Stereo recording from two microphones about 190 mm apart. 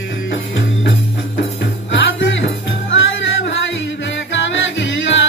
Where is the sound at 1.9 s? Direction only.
65° left (ahead or behind).